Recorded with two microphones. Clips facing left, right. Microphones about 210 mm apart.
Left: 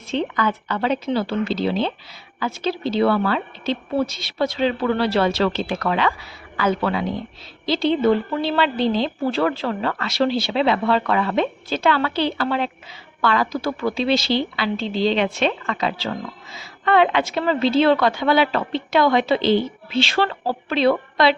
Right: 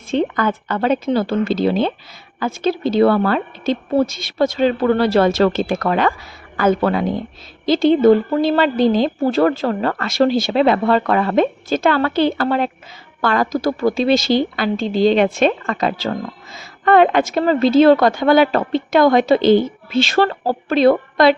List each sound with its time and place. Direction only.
0.1 s a woman's voice: 50° right (ahead or behind)